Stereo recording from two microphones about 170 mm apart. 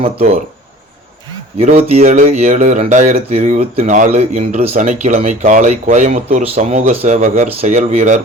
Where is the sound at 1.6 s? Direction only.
40° right (ahead or behind).